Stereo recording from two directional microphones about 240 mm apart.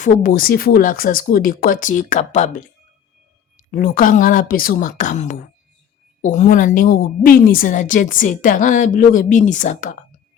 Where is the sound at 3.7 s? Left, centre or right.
Left.